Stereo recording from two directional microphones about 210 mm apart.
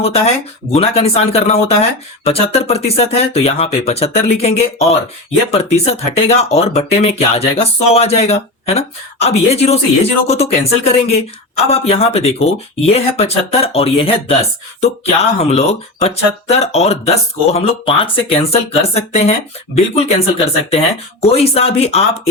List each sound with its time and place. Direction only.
0.7 s speech: 30° left (ahead or behind)